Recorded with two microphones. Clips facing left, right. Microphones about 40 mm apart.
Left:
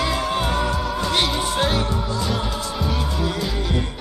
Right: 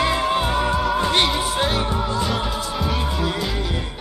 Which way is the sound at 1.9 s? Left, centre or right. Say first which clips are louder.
Right 2 dB; right.